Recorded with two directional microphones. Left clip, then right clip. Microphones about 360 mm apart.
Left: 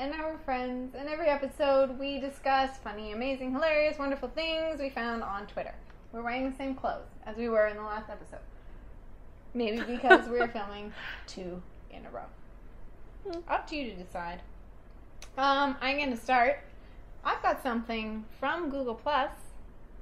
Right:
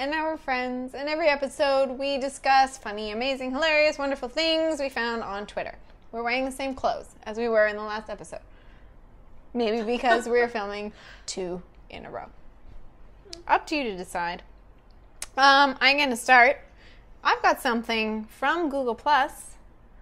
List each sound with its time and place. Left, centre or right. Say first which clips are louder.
0.0 s a woman's voice: right 7 dB; right
7.3 s a woman's voice: right 5 dB; right
9.6 s a woman's voice: right 7 dB; right
11.9 s a woman's voice: right 6 dB; right
13.3 s a woman's voice: right 8 dB; right